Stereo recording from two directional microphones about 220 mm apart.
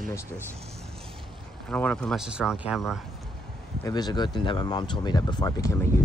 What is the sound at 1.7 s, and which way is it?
Speech, 5° left (ahead or behind).